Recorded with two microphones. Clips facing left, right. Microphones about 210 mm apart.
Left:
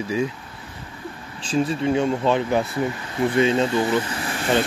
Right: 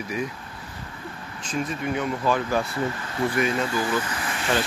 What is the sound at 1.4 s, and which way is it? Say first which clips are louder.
Speech: left 7 dB; 30° left (ahead or behind).